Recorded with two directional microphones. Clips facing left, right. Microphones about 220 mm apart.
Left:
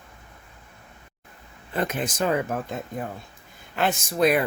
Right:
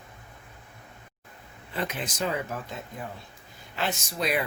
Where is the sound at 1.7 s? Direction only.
50° left (ahead or behind).